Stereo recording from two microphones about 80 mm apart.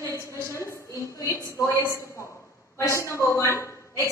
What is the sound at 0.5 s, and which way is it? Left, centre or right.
Speech, left.